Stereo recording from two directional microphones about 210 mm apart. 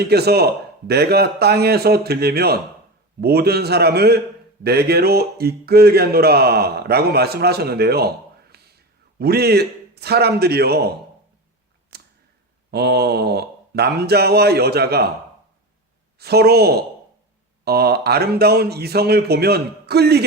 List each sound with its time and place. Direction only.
0.0 s speech: 50° right (ahead or behind)
11.9 s tick-tock: 50° right (ahead or behind)
12.7 s speech: 50° right (ahead or behind)
16.1 s speech: 50° right (ahead or behind)